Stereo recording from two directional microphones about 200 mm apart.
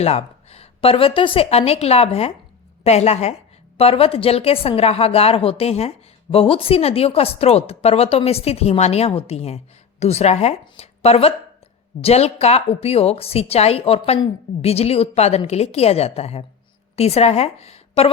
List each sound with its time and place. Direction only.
0.0 s a woman's voice: 30° left (ahead or behind)